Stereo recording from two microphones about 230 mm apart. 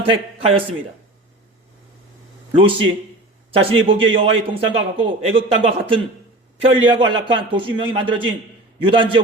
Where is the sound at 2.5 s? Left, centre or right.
Right.